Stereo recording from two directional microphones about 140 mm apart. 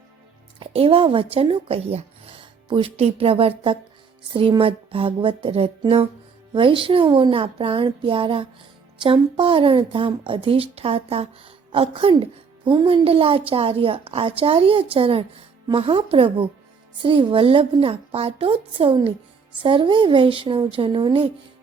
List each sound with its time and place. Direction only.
0.6 s a woman's voice: 40° right (ahead or behind)